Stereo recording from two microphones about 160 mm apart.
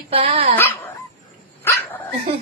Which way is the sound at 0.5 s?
15° left (ahead or behind).